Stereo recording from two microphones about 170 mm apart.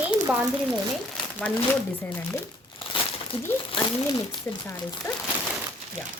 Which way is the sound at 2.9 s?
30° left (ahead or behind).